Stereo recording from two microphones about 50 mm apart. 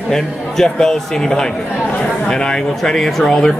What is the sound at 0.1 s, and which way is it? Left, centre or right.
A man's voice, centre.